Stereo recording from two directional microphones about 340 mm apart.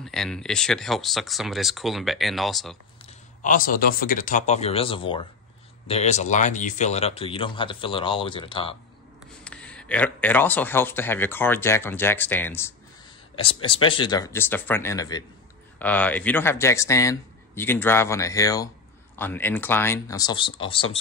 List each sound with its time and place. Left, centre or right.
0.0 s speech: centre
3.4 s speech: left
9.4 s speech: centre